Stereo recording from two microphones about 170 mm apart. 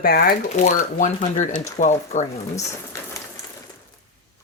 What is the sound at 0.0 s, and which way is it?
Speech, 65° left (ahead or behind).